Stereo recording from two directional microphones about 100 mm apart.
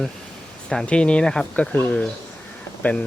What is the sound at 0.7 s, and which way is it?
Speech, 10° left (ahead or behind).